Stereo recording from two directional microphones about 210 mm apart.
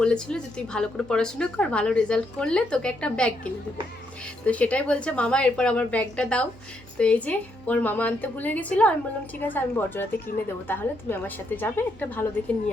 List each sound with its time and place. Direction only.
0.0 s a woman's voice: 5° left (ahead or behind)
4.4 s a woman's voice: 5° left (ahead or behind)
10.3 s a woman's voice: 40° left (ahead or behind)
10.7 s a woman's voice: 10° left (ahead or behind)